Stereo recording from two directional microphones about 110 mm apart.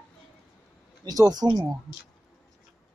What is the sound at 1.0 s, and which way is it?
Speech, 35° right (ahead or behind).